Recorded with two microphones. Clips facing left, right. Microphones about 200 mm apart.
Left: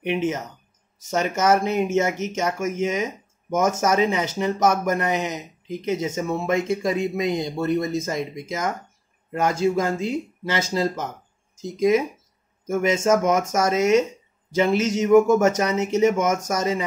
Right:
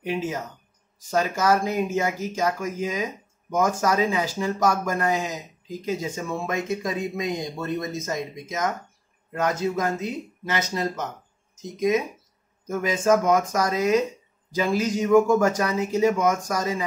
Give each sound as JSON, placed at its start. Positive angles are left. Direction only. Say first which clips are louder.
{"t": 0.0, "sound": "speech", "louder": "left 4 dB", "side_deg": 20}
{"t": 12.6, "sound": "speech", "louder": "left 2 dB", "side_deg": 25}